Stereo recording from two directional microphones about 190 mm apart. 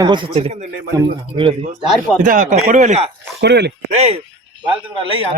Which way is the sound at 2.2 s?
45° right (ahead or behind).